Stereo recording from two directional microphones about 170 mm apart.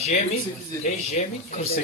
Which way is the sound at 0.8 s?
50° left (ahead or behind).